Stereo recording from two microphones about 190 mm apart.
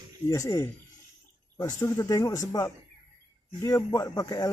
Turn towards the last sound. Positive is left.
turn(degrees=20)  # may be behind; listen again after turning